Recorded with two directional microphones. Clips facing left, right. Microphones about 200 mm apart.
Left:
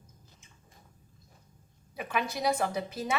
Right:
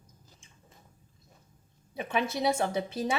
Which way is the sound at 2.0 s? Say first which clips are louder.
Right 2 dB; 25° right (ahead or behind).